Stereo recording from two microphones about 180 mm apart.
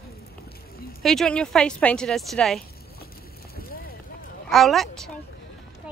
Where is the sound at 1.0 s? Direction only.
Centre (ahead or behind).